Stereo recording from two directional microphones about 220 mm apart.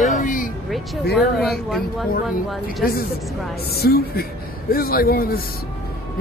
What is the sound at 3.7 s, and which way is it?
Speech, 45° left (ahead or behind).